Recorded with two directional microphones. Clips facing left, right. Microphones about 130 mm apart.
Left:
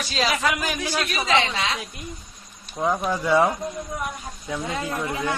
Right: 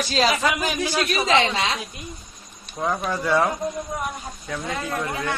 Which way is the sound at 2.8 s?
10° left (ahead or behind).